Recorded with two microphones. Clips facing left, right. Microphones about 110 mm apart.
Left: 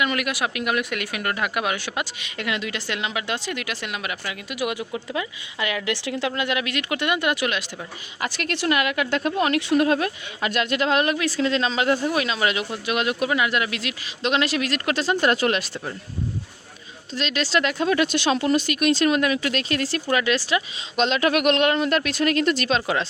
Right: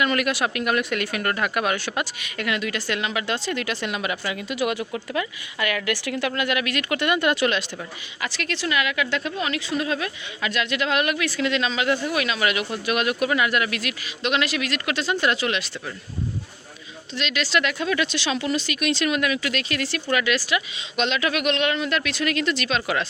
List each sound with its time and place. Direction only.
0.0 s speech: 10° left (ahead or behind)
8.2 s a woman's voice: 45° left (ahead or behind)
17.2 s a woman's voice: 35° left (ahead or behind)